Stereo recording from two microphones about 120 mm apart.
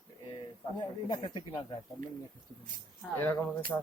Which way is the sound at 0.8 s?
40° left (ahead or behind).